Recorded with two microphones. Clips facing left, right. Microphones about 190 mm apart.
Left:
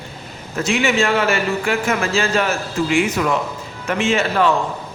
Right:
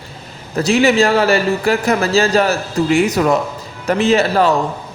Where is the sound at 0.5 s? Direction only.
35° right (ahead or behind).